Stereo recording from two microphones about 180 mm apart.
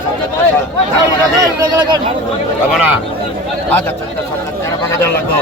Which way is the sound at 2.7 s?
5° right (ahead or behind).